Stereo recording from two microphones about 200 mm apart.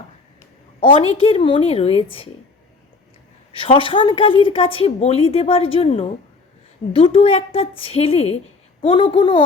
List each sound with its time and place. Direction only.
0.8 s a woman's voice: 25° left (ahead or behind)
3.5 s a woman's voice: 25° left (ahead or behind)